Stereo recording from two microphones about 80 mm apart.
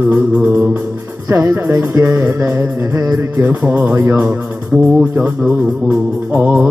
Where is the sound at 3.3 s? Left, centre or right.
Right.